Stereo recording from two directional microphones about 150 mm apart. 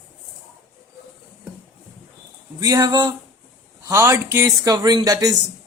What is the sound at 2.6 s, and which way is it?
Speech, 25° right (ahead or behind).